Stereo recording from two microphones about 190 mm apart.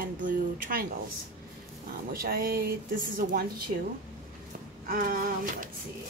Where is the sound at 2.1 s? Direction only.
50° right (ahead or behind).